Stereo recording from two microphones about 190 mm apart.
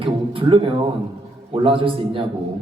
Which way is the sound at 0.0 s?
25° right (ahead or behind).